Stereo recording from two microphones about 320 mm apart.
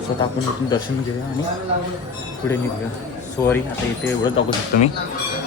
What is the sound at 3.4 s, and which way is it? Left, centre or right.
Speech, centre.